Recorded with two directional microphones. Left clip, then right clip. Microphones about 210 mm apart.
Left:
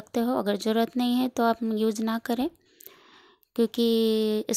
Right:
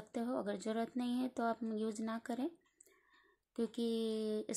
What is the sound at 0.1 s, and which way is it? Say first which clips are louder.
Speech: left 14 dB; 40° left (ahead or behind).